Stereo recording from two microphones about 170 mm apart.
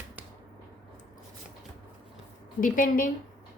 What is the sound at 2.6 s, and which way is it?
Speech, 55° left (ahead or behind).